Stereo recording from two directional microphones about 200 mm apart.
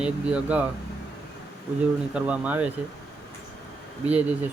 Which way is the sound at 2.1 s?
5° right (ahead or behind).